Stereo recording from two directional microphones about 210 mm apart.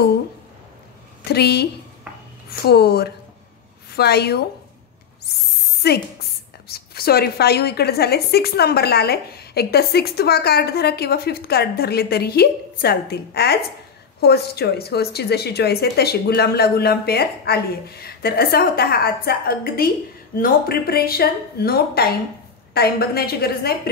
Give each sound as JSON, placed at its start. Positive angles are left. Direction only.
{"t": 1.2, "sound": "a woman's voice", "side_deg": 50}
{"t": 5.8, "sound": "a woman's voice", "side_deg": 50}